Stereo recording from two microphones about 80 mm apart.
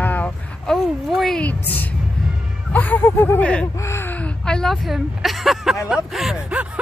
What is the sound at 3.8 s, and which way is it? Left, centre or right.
Speech, left.